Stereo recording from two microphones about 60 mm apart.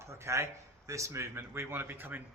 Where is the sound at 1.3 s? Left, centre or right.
Right.